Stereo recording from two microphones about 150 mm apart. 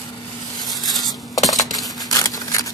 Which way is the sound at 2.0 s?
25° left (ahead or behind).